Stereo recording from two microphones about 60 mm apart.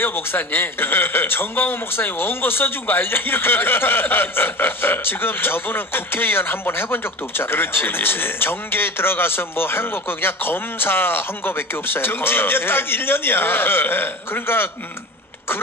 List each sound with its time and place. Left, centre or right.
0.0 s a man's voice: left